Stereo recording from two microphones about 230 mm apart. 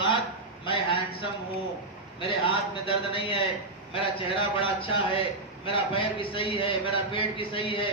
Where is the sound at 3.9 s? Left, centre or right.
Left.